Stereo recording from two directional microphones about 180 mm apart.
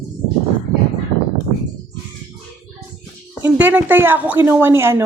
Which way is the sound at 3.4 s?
10° right (ahead or behind).